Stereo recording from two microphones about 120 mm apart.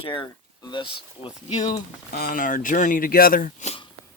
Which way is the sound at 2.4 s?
90° left.